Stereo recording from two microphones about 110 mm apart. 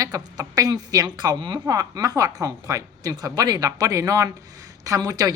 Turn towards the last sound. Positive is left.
turn(degrees=-35)  # may be behind; listen again after turning